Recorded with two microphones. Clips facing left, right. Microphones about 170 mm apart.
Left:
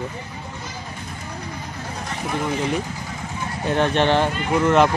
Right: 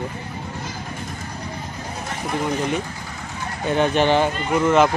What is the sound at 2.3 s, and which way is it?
A man's voice, centre (ahead or behind).